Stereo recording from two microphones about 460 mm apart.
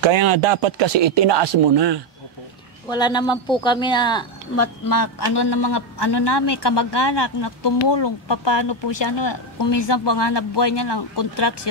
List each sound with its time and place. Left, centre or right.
0.0 s speech: right
2.9 s speech: centre
4.8 s a man's voice: left